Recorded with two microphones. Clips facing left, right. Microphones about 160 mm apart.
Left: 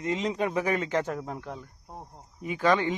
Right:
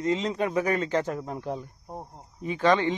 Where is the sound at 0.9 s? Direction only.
15° right (ahead or behind).